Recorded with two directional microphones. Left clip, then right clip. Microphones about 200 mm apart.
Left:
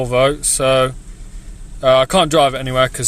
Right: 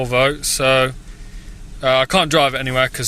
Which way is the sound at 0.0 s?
15° left (ahead or behind).